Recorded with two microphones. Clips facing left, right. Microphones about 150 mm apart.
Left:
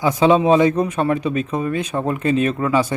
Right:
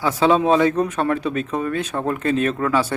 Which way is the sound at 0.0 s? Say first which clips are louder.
Left 2 dB; 10° left (ahead or behind).